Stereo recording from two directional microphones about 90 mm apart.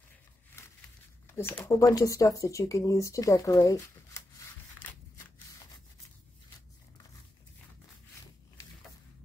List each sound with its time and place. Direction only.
1.3 s speech: 25° left (ahead or behind)